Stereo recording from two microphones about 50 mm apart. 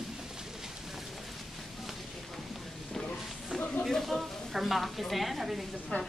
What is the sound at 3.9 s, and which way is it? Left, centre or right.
A woman's voice, centre.